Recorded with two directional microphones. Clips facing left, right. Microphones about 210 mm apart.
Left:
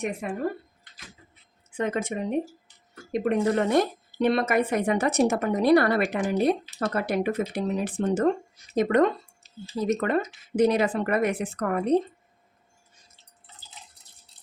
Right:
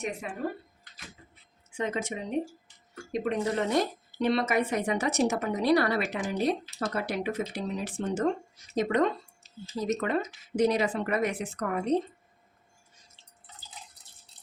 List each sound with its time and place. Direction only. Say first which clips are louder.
0.2 s speech: left 7 dB; 50° left (ahead or behind)
1.7 s speech: left 4 dB; 55° left (ahead or behind)